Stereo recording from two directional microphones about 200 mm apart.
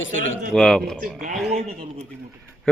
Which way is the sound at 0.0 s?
70° left (ahead or behind).